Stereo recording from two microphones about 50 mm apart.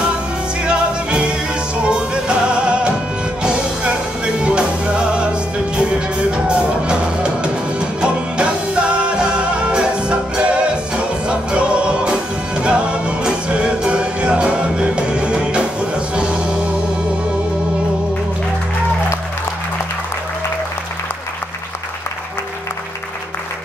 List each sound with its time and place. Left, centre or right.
0.7 s music: centre